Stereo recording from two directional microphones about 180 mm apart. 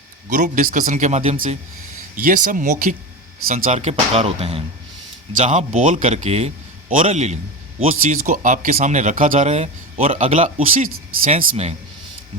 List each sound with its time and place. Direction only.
0.3 s speech: 45° right (ahead or behind)